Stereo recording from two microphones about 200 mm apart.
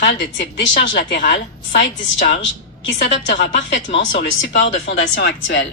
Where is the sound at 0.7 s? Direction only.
40° left (ahead or behind).